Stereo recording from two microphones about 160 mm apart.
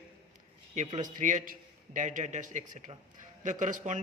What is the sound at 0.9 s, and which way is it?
A man's voice, 55° right (ahead or behind).